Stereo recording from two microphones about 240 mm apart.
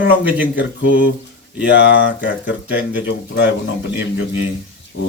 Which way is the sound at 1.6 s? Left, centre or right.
Left.